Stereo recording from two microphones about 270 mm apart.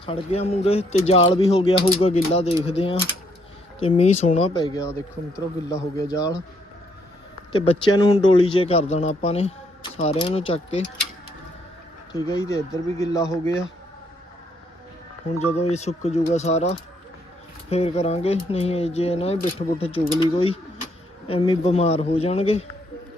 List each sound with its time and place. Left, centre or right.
0.0 s speech: left
7.5 s speech: centre
12.3 s speech: centre
15.7 s speech: left